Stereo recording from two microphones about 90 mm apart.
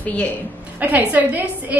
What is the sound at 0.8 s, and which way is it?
Speech, 20° right (ahead or behind).